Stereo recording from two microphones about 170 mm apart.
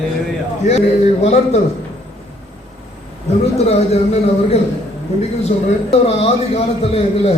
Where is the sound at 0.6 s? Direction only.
40° left (ahead or behind).